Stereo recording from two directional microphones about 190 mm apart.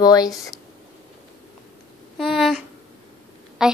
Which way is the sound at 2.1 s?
Centre (ahead or behind).